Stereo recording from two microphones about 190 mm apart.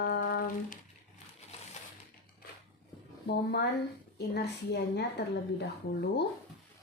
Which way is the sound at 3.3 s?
60° left (ahead or behind).